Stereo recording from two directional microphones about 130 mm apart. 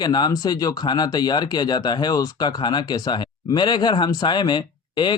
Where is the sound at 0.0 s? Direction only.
30° left (ahead or behind).